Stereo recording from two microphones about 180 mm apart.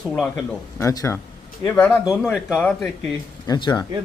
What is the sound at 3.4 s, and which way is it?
Speech, 25° left (ahead or behind).